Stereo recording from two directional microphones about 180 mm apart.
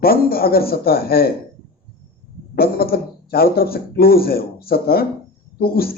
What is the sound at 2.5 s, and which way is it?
A woman's voice, 55° left (ahead or behind).